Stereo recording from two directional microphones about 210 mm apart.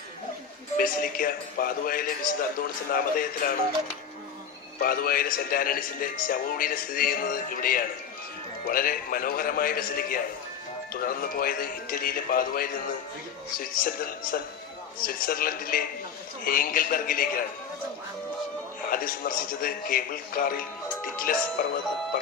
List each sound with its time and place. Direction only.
0.8 s a man's voice: 45° left (ahead or behind)
4.8 s a man's voice: 45° left (ahead or behind)
18.9 s a man's voice: 40° left (ahead or behind)